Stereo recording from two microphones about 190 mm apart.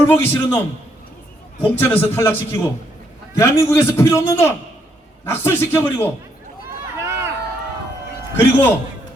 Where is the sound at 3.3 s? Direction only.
15° left (ahead or behind).